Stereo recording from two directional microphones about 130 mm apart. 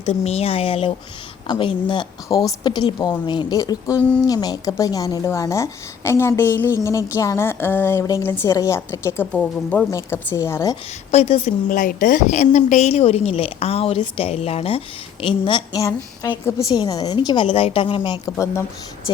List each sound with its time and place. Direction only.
0.0 s a woman's voice: 55° left (ahead or behind); by 9.2 s 20° left (ahead or behind)
9.3 s speech: 10° left (ahead or behind)
9.9 s a woman's voice: 20° left (ahead or behind)
11.1 s a woman's voice: 55° left (ahead or behind)
11.7 s a woman's voice: 90° left; by 15.8 s 40° left (ahead or behind)
15.8 s a woman's voice: 25° left (ahead or behind)